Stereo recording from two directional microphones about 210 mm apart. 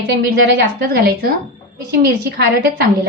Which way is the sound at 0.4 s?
50° right (ahead or behind).